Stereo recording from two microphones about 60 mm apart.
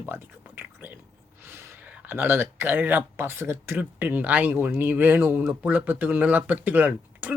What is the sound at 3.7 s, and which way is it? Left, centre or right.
Speech, right.